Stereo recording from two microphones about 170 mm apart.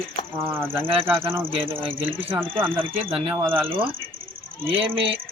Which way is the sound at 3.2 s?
10° right (ahead or behind).